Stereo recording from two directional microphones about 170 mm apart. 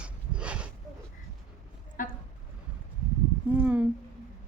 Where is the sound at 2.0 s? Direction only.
55° left (ahead or behind).